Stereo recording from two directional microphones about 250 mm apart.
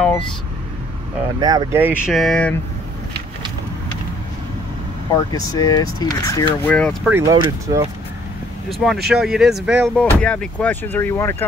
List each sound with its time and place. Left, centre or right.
1.4 s speech: centre
5.3 s speech: centre
7.1 s speech: centre
8.6 s speech: centre